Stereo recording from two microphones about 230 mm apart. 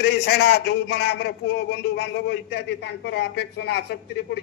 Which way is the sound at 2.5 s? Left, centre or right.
Left.